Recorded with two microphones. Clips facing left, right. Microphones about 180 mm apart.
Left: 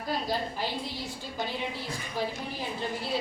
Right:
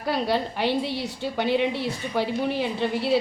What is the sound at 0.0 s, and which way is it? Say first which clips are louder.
A woman's voice: right 6 dB; 70° right (ahead or behind).